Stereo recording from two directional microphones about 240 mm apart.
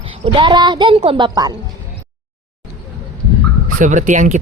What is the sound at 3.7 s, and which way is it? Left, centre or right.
Speech, right.